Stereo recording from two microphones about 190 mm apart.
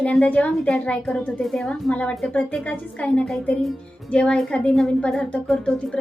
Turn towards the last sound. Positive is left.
turn(degrees=5)  # may be behind; listen again after turning